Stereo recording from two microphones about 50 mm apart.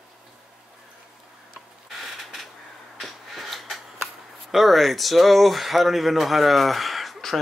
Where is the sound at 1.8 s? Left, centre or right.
Centre.